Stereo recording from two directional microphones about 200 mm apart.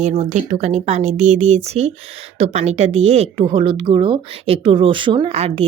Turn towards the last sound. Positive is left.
turn(degrees=-30)  # may be behind; listen again after turning